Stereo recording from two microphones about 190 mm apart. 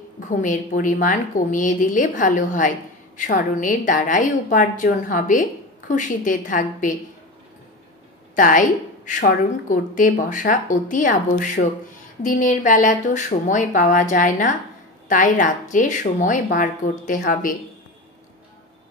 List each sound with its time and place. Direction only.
0.3 s a woman's voice: 40° left (ahead or behind)
8.4 s a woman's voice: 45° left (ahead or behind)